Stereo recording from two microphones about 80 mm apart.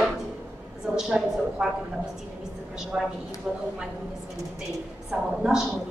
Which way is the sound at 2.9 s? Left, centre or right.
Right.